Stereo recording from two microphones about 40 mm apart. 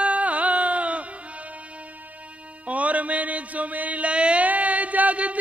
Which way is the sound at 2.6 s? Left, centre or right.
Right.